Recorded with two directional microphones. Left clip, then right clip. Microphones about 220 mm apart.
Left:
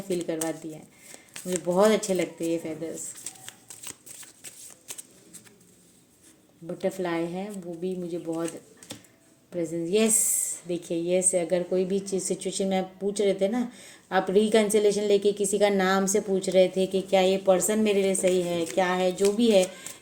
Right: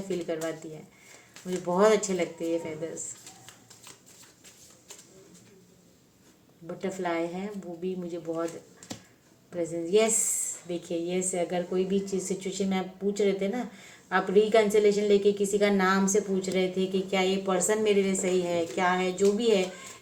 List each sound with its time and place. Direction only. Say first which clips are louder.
0.1 s speech: left 3 dB; 50° left (ahead or behind)
6.7 s speech: left 2 dB; 50° left (ahead or behind)
10.7 s speech: left 5 dB; 50° left (ahead or behind)